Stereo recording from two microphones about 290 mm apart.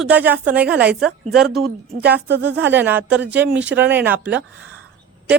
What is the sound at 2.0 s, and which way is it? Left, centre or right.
Speech, right.